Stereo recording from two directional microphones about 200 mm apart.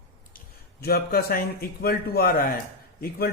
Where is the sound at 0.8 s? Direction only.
50° left (ahead or behind).